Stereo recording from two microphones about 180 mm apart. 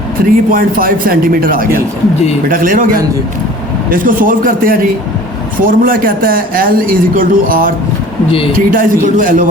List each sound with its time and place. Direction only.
0.2 s a man's voice: 55° right (ahead or behind)